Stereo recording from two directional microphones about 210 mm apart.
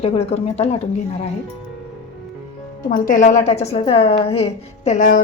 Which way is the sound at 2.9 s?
40° left (ahead or behind).